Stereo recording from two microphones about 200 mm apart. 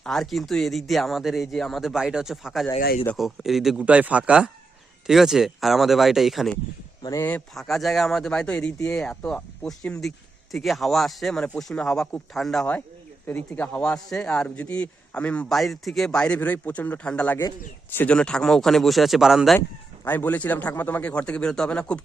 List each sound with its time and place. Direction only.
0.0 s a man's voice: centre (ahead or behind)
2.7 s speech: 50° left (ahead or behind)
3.1 s a man's voice: centre (ahead or behind)
7.0 s a man's voice: 15° left (ahead or behind); by 19.5 s centre (ahead or behind)
20.1 s a man's voice: 10° left (ahead or behind)